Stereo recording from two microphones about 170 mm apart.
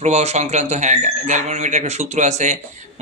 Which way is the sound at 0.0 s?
40° right (ahead or behind).